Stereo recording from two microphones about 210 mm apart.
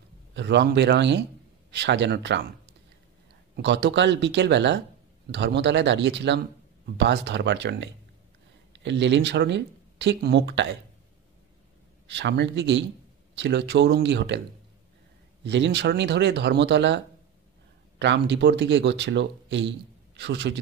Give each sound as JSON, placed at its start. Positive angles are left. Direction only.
{"t": 0.3, "sound": "speech", "side_deg": -55}
{"t": 3.5, "sound": "speech", "side_deg": -55}
{"t": 12.1, "sound": "speech", "side_deg": -55}
{"t": 15.4, "sound": "speech", "side_deg": -55}